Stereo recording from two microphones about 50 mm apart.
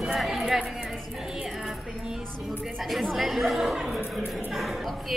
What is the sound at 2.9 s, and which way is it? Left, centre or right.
Speech, centre.